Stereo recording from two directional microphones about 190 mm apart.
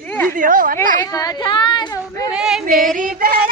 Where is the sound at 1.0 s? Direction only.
20° left (ahead or behind).